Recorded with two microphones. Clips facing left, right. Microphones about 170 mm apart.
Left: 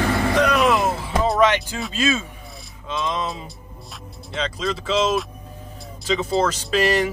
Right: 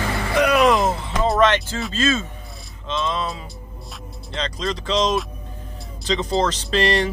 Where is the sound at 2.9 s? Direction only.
10° left (ahead or behind).